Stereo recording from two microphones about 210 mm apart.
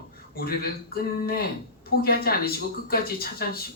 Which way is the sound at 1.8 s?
45° left (ahead or behind).